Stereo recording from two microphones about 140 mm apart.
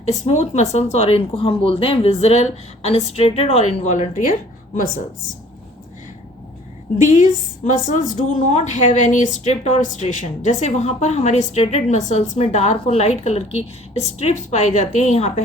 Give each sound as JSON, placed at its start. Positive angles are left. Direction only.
{"t": 0.0, "sound": "speech", "side_deg": 50}
{"t": 7.0, "sound": "a woman's voice", "side_deg": 65}